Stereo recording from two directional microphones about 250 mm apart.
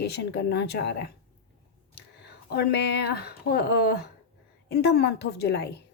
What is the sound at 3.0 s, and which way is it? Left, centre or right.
A woman's voice, left.